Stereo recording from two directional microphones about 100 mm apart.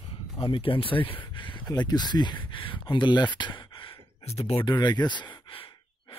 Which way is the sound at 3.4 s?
50° left (ahead or behind).